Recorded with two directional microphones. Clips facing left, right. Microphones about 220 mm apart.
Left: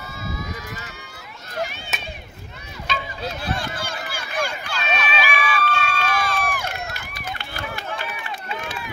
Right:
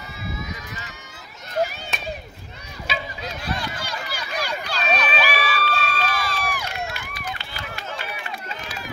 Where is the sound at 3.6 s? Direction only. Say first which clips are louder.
Left 1 dB; 50° left (ahead or behind).